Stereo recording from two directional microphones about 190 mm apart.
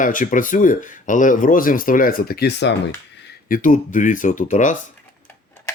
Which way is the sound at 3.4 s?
45° left (ahead or behind).